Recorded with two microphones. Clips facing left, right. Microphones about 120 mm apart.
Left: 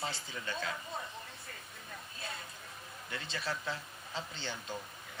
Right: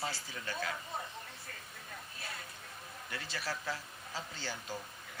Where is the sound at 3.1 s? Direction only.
25° left (ahead or behind).